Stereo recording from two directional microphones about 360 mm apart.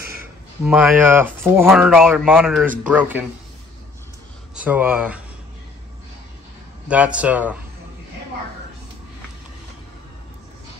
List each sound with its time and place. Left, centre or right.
0.2 s speech: centre
4.6 s speech: centre
6.9 s speech: centre